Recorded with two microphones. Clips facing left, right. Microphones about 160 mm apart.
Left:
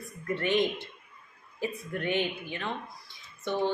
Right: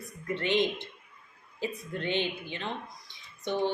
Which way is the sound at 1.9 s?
20° right (ahead or behind).